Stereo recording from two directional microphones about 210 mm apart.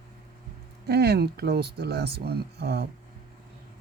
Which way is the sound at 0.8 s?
50° right (ahead or behind).